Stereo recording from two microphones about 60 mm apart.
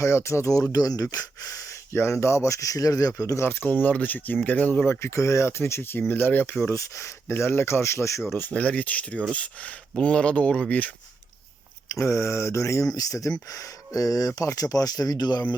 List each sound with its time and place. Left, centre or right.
0.0 s speech: left
0.7 s speech: left
1.1 s speech: left
3.3 s speech: left
3.7 s speech: left
4.9 s speech: left
6.7 s speech: left
7.3 s speech: left
8.3 s speech: left
8.5 s speech: left
11.9 s speech: left